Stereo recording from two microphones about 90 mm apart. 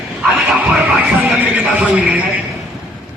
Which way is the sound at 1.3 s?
10° right (ahead or behind).